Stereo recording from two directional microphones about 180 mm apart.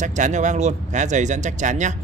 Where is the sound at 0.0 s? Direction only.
40° right (ahead or behind).